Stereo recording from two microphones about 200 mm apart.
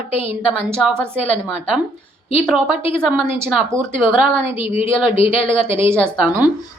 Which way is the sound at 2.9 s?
15° right (ahead or behind).